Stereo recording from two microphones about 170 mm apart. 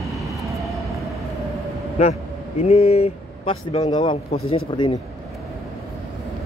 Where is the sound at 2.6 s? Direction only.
35° left (ahead or behind).